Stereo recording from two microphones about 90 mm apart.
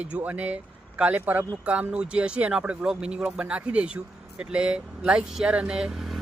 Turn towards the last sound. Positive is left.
turn(degrees=-5)  # may be behind; listen again after turning